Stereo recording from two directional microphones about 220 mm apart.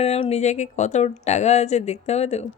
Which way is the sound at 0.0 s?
30° left (ahead or behind).